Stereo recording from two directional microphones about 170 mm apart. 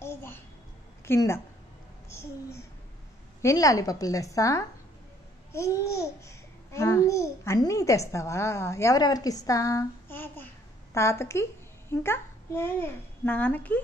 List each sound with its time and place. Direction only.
0.0 s babbling: 15° left (ahead or behind)
1.0 s a woman's voice: 15° left (ahead or behind)